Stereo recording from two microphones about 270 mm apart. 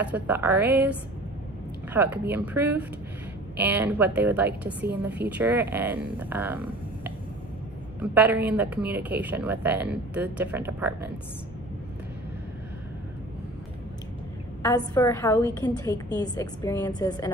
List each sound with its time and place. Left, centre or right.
0.0 s speech: centre
2.0 s speech: centre
4.8 s a woman's voice: right
5.3 s speech: centre
8.0 s speech: centre
14.6 s a woman's voice: centre